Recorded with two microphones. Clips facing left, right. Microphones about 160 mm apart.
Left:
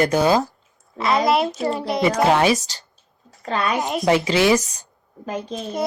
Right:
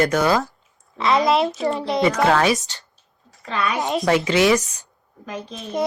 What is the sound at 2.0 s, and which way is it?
Speech, 25° left (ahead or behind).